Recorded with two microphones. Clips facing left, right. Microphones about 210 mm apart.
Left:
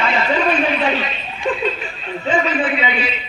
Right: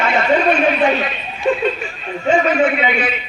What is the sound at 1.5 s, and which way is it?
Speech, 45° right (ahead or behind).